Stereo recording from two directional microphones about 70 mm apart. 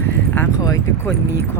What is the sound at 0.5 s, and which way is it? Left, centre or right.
Speech, left.